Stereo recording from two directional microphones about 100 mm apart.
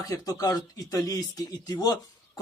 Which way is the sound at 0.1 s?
35° left (ahead or behind).